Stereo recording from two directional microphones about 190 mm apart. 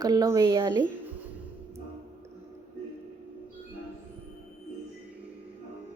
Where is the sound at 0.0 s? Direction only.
20° right (ahead or behind).